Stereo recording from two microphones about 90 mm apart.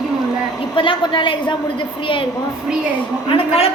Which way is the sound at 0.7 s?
70° left (ahead or behind).